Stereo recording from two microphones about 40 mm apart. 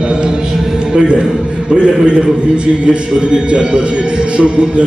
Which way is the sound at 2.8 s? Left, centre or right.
Right.